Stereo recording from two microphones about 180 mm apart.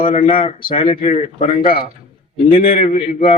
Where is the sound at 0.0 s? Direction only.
35° left (ahead or behind).